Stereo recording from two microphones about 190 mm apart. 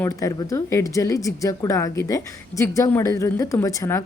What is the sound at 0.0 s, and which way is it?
Speech, 15° left (ahead or behind).